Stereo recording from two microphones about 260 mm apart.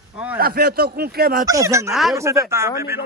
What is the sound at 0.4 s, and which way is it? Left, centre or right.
Speech, right.